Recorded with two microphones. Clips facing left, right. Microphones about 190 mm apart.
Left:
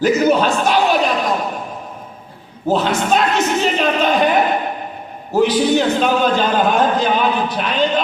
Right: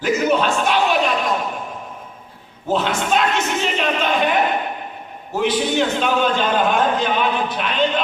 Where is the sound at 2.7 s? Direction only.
40° left (ahead or behind).